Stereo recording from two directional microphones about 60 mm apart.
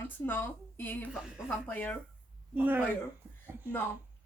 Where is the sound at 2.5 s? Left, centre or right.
Right.